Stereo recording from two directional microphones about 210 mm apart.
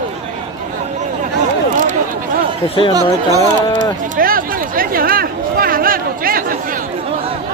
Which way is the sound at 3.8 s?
40° right (ahead or behind).